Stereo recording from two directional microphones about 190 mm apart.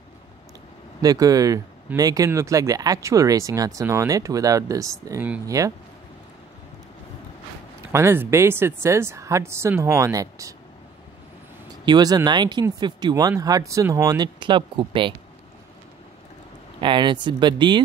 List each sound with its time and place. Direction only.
1.0 s speech: 20° right (ahead or behind)
7.9 s speech: 15° right (ahead or behind)
11.8 s speech: 20° right (ahead or behind)
16.8 s speech: 25° right (ahead or behind)